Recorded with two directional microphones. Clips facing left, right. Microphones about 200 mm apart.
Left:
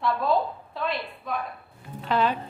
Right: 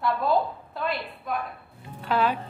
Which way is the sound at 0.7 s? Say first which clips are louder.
Even; centre (ahead or behind).